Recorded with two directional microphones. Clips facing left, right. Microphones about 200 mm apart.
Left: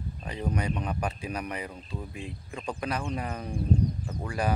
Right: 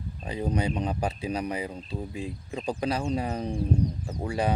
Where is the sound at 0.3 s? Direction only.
25° right (ahead or behind).